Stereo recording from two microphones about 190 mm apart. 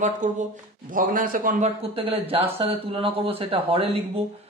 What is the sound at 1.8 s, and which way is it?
Speech, 30° right (ahead or behind).